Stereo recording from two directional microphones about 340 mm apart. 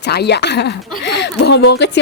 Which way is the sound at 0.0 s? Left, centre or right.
Left.